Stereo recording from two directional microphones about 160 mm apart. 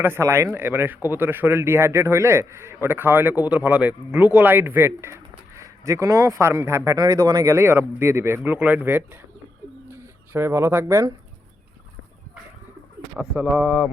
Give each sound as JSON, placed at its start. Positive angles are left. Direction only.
{"t": 0.0, "sound": "speech", "side_deg": -15}
{"t": 13.1, "sound": "speech", "side_deg": -5}